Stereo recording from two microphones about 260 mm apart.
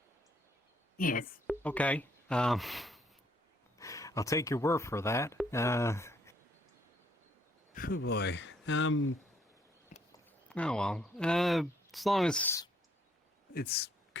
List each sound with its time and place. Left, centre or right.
0.9 s a woman's voice: left
1.5 s speech: centre
3.8 s speech: centre
7.7 s speech: left
10.1 s speech: centre
13.5 s a sound: left